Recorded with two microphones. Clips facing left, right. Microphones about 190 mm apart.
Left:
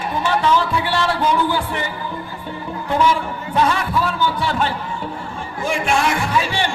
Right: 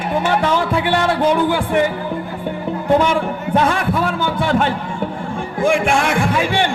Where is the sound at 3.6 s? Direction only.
55° right (ahead or behind).